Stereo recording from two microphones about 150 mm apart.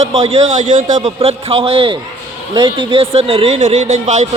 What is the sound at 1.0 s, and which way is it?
A man's voice, 40° right (ahead or behind).